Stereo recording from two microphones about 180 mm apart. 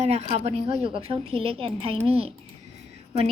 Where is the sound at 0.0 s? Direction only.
35° right (ahead or behind).